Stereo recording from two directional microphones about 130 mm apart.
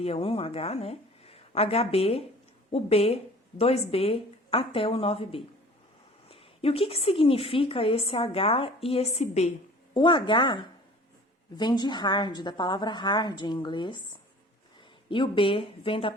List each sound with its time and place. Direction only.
0.0 s a woman's voice: 50° left (ahead or behind)
9.9 s a woman's voice: 35° left (ahead or behind)
15.1 s a woman's voice: 40° left (ahead or behind)